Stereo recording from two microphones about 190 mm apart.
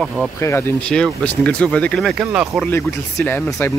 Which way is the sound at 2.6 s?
10° left (ahead or behind).